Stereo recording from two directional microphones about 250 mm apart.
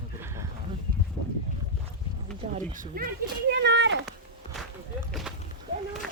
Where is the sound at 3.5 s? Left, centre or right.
Right.